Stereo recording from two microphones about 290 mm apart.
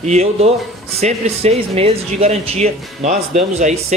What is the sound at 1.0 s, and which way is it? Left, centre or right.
Speech, right.